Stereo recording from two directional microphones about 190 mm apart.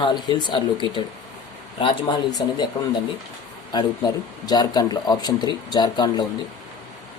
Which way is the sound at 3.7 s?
20° left (ahead or behind).